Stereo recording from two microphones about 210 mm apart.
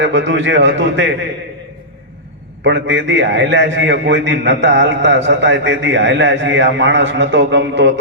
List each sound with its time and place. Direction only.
0.0 s a man's voice: 60° right (ahead or behind)
2.6 s a man's voice: 60° right (ahead or behind)